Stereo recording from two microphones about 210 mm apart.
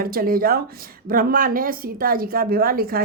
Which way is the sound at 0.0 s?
45° right (ahead or behind).